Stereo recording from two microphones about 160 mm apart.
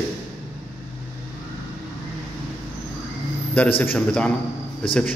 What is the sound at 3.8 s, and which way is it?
Speech, 10° left (ahead or behind).